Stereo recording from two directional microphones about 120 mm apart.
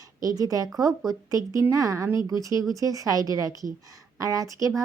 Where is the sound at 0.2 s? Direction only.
30° right (ahead or behind).